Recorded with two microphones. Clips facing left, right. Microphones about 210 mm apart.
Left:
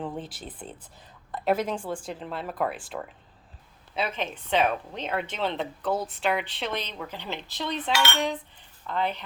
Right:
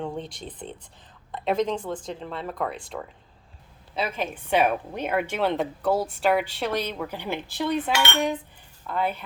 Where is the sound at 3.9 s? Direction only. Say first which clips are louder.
Right 2 dB; 5° right (ahead or behind).